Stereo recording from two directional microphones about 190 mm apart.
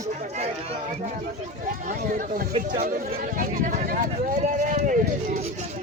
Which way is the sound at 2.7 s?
50° right (ahead or behind).